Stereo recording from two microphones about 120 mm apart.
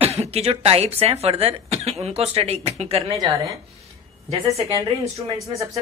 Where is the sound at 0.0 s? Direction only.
60° right (ahead or behind).